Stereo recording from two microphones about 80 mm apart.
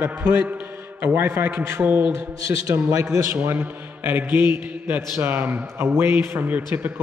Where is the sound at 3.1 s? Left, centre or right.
Right.